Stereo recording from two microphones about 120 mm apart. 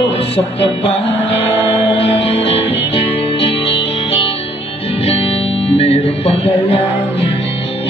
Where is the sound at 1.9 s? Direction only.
55° left (ahead or behind).